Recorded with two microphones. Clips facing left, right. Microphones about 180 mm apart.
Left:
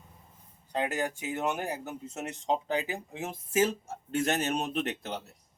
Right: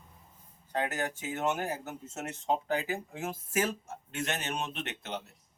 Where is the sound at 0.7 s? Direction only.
15° left (ahead or behind).